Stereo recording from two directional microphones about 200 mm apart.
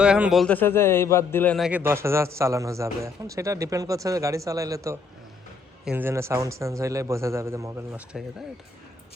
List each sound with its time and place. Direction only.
0.0 s speech: 5° right (ahead or behind)
1.5 s a man's voice: 5° right (ahead or behind)